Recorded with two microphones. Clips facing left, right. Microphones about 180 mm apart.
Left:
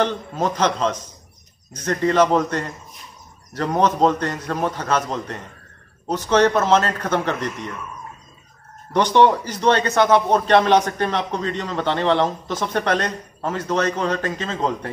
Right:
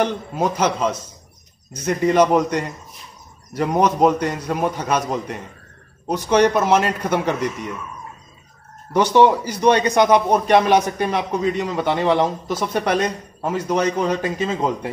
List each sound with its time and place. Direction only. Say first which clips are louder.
0.0 s a man's voice: right 1 dB; 10° right (ahead or behind)
8.9 s a man's voice: right 1 dB; 10° right (ahead or behind)